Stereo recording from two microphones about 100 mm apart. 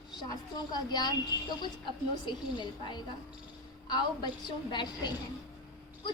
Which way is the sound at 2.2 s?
50° left (ahead or behind).